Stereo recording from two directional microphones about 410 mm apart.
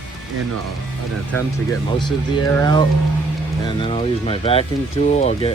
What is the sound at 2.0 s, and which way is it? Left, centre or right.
Speech, centre.